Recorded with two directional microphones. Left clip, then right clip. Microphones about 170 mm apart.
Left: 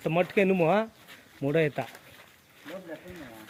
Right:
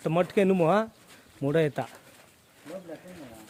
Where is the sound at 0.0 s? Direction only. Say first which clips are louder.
Even; 15° right (ahead or behind).